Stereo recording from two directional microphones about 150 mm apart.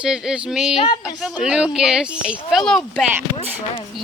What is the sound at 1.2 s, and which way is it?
Speech, 5° right (ahead or behind).